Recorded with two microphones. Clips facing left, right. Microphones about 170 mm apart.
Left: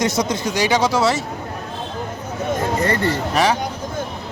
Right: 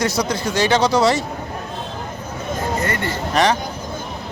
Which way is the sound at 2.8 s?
30° left (ahead or behind).